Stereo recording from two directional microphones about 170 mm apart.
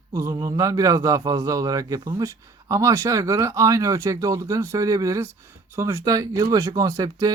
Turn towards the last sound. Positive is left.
turn(degrees=-20)  # may be behind; listen again after turning